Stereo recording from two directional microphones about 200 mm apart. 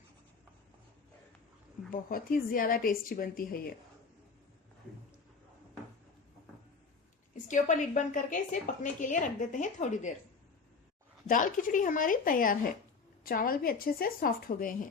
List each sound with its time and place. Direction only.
1.9 s a woman's voice: 45° left (ahead or behind)
7.4 s a woman's voice: 40° left (ahead or behind)
11.3 s a woman's voice: 40° left (ahead or behind)